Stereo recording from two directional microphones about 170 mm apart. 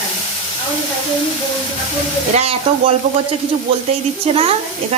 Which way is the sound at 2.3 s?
35° right (ahead or behind).